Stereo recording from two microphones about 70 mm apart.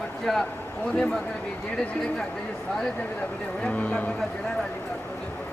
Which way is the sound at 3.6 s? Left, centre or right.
Centre.